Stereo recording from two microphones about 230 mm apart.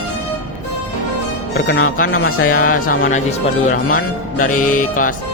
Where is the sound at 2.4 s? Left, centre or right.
Left.